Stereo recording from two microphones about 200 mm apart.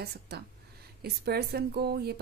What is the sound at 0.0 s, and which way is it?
A woman's voice, 55° right (ahead or behind).